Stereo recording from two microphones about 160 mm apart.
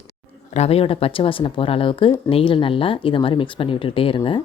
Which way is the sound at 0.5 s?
40° left (ahead or behind).